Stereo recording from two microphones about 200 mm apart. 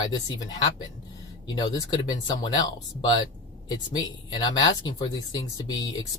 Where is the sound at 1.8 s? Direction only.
20° left (ahead or behind).